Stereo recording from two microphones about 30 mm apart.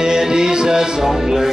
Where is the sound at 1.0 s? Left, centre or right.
Centre.